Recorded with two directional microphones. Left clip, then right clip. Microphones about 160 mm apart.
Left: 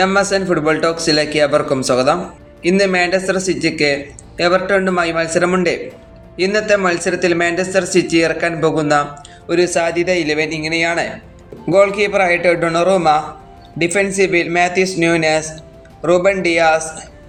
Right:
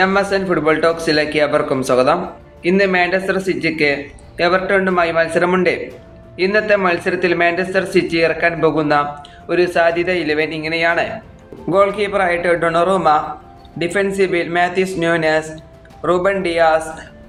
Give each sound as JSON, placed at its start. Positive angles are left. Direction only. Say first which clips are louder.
{"t": 0.0, "sound": "speech", "louder": "left 1 dB", "side_deg": 35}
{"t": 16.5, "sound": "a man's voice", "louder": "right 1 dB", "side_deg": 45}